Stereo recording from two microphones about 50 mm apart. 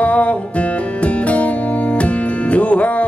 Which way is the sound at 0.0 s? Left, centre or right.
Left.